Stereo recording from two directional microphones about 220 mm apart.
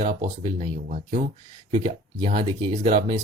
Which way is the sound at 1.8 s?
25° right (ahead or behind).